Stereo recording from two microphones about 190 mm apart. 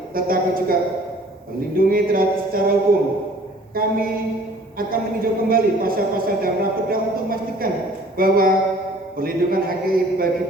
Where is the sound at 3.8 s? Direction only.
50° right (ahead or behind).